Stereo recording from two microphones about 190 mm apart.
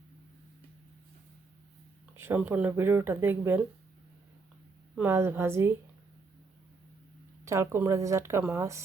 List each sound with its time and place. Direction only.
2.1 s speech: 10° right (ahead or behind)
4.9 s speech: 10° right (ahead or behind)
7.4 s speech: 15° right (ahead or behind)